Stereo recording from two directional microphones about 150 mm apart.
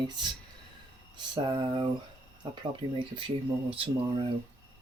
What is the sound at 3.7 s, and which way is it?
Speech, 35° right (ahead or behind).